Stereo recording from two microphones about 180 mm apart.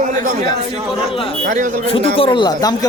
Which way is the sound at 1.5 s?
45° right (ahead or behind).